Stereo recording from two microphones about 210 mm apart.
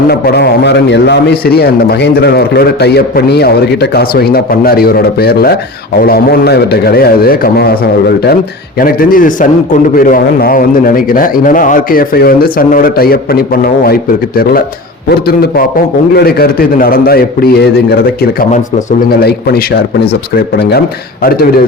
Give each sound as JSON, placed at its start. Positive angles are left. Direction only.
{"t": 0.1, "sound": "a man's voice", "side_deg": 50}
{"t": 8.8, "sound": "a man's voice", "side_deg": 40}